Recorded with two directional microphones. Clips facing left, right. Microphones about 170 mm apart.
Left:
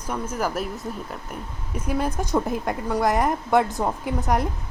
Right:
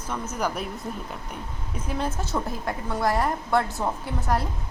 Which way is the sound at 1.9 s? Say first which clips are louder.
Left 4 dB; 10° left (ahead or behind).